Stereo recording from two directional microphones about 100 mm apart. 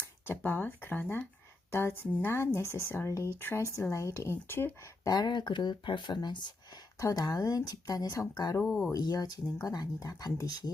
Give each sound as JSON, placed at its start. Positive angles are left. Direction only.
{"t": 0.3, "sound": "speech", "side_deg": 20}
{"t": 5.0, "sound": "speech", "side_deg": 45}
{"t": 8.6, "sound": "speech", "side_deg": 0}
{"t": 8.9, "sound": "speech", "side_deg": 40}